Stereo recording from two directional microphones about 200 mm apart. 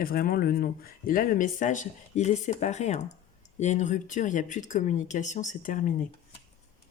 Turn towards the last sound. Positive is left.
turn(degrees=40)  # may be behind; listen again after turning